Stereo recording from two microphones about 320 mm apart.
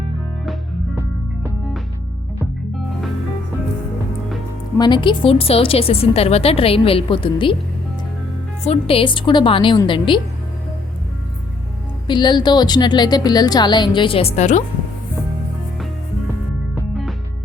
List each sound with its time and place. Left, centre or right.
4.8 s a woman's voice: centre
8.6 s a woman's voice: centre
12.0 s a woman's voice: centre